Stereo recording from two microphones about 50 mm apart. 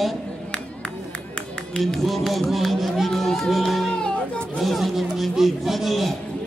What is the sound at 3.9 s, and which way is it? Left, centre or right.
Music, centre.